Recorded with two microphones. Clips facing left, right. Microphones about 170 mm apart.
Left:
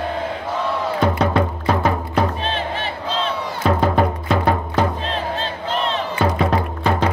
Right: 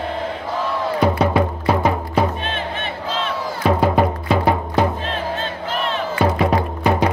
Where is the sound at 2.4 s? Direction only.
30° left (ahead or behind).